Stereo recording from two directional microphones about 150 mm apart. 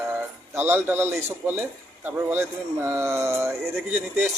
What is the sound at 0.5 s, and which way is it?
Speech, 15° right (ahead or behind).